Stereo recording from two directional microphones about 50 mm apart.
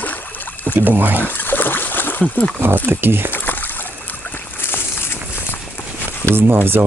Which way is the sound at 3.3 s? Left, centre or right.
Left.